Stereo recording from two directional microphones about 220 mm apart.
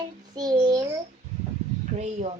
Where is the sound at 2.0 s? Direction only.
30° right (ahead or behind).